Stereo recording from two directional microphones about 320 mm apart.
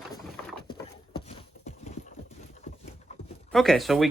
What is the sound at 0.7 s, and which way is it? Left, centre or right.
Clip-clop, centre.